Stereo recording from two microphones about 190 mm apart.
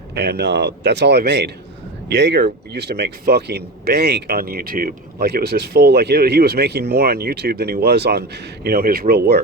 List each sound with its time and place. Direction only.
0.1 s speech: 60° right (ahead or behind)